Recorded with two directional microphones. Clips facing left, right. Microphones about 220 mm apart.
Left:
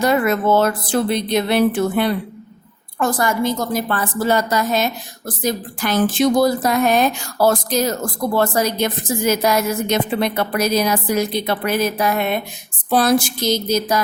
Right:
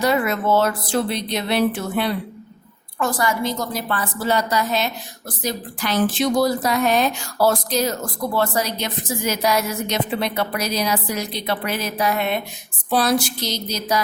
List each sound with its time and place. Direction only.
0.0 s a woman's voice: 50° left (ahead or behind)